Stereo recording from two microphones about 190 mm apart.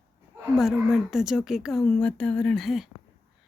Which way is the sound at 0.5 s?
Centre (ahead or behind).